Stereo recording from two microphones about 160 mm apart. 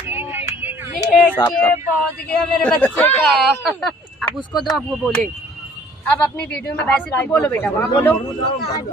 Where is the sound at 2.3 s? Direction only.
10° left (ahead or behind).